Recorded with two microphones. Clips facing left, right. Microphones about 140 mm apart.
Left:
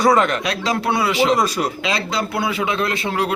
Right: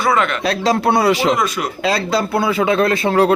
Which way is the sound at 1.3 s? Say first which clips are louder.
Even; 35° left (ahead or behind).